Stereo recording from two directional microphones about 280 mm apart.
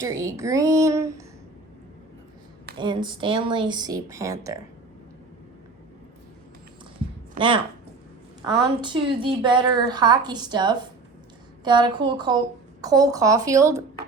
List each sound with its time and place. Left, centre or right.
0.0 s a woman's voice: centre
2.7 s a woman's voice: centre
7.3 s a woman's voice: centre